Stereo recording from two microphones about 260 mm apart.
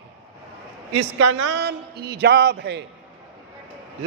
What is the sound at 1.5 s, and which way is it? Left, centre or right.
Speech, right.